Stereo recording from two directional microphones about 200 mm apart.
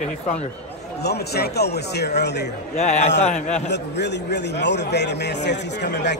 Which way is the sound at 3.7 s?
60° left (ahead or behind).